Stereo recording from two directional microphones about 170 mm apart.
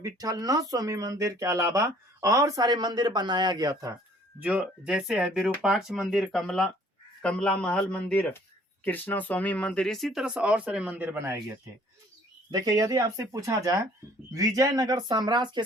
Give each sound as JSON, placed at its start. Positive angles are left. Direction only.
{"t": 0.0, "sound": "speech", "side_deg": -20}
{"t": 4.4, "sound": "a man's voice", "side_deg": -5}
{"t": 12.5, "sound": "speech", "side_deg": -20}